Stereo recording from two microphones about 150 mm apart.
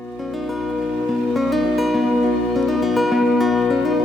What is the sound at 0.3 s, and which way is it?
Music, centre (ahead or behind).